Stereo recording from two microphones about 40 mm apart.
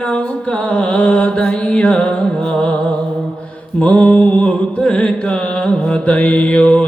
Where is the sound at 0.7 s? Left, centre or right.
Left.